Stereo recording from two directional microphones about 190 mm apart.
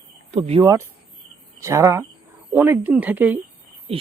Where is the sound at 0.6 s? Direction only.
15° right (ahead or behind).